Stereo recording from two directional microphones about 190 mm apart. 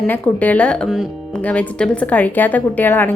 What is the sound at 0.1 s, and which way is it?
A woman's voice, 10° left (ahead or behind).